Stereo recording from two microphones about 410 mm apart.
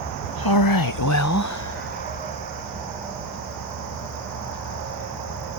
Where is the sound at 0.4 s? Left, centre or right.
Left.